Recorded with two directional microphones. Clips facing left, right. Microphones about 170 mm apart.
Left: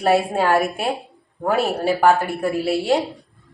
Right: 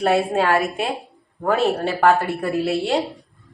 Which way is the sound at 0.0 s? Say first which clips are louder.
Even; 5° left (ahead or behind).